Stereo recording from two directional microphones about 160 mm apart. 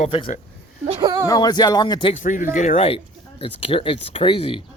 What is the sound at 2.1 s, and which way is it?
Speech, 55° left (ahead or behind).